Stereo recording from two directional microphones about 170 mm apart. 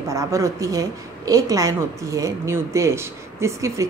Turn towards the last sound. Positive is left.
turn(degrees=-15)  # may be behind; listen again after turning